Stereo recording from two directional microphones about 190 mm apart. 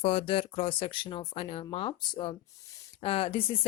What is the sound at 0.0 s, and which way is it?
Speech, 30° left (ahead or behind).